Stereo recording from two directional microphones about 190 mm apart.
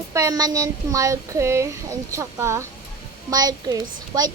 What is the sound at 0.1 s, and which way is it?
A woman's voice, 20° right (ahead or behind).